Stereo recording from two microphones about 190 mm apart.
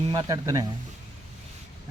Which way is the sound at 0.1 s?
20° right (ahead or behind).